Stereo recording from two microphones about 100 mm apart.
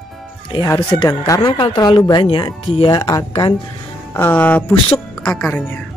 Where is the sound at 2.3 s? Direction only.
55° left (ahead or behind).